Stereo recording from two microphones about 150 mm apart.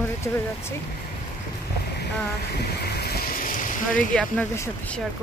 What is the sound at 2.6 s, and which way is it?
Boat, 90° left.